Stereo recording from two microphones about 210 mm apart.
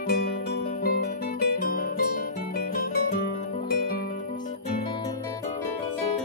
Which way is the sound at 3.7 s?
50° left (ahead or behind).